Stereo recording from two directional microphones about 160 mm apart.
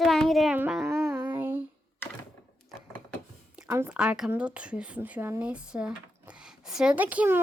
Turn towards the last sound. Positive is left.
turn(degrees=-10)  # may be behind; listen again after turning